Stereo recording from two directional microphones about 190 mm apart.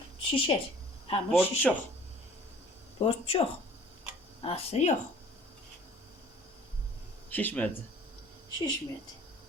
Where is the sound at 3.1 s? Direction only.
30° left (ahead or behind).